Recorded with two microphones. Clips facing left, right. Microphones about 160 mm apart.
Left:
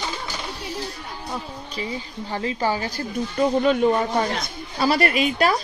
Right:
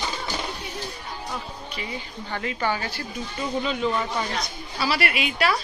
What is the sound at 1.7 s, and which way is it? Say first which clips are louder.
A woman's voice: left 6 dB; 35° left (ahead or behind).